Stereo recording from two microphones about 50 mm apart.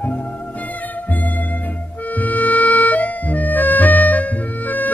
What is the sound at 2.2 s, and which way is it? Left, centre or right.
Music, left.